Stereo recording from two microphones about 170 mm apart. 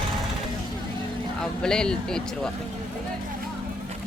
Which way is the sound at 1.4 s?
5° left (ahead or behind).